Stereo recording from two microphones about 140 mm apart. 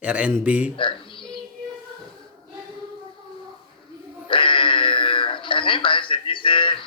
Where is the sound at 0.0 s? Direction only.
10° right (ahead or behind).